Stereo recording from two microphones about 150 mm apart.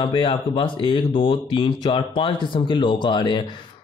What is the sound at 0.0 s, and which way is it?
Speech, 35° left (ahead or behind).